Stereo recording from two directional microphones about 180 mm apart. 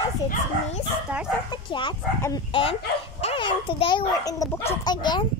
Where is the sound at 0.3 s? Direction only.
35° left (ahead or behind).